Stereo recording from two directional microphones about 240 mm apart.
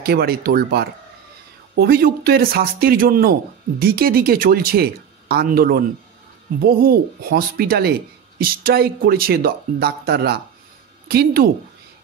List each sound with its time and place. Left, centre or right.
0.0 s speech: right